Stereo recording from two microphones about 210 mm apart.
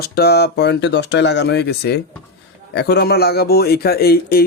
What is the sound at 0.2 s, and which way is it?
Speech, 50° left (ahead or behind).